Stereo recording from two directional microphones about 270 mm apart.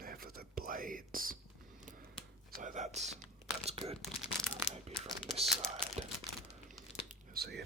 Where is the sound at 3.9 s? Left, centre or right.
Centre.